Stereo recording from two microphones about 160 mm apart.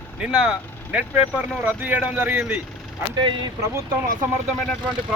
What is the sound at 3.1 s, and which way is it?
Speech, 30° right (ahead or behind).